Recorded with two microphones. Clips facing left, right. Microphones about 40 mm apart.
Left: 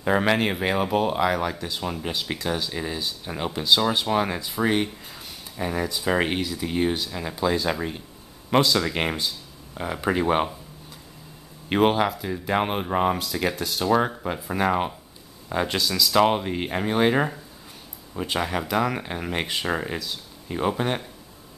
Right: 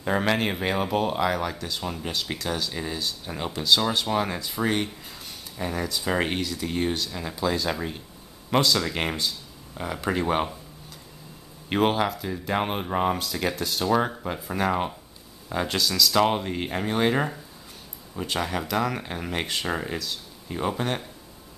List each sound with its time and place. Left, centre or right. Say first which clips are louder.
0.0 s speech: left 3 dB; centre
11.7 s speech: left 3 dB; centre